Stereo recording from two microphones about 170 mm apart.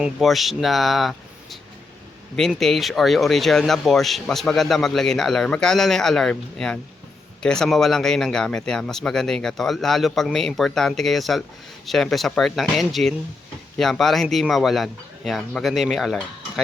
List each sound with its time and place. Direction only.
0.0 s speech: centre (ahead or behind)